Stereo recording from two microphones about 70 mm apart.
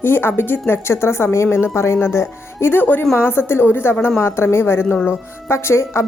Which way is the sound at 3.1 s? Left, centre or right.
Left.